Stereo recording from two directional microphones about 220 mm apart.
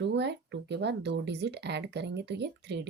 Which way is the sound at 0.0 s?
50° right (ahead or behind).